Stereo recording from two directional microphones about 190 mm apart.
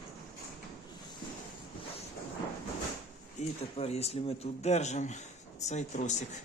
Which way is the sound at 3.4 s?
35° left (ahead or behind).